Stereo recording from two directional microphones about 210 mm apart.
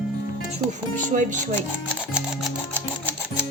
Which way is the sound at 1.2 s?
35° right (ahead or behind).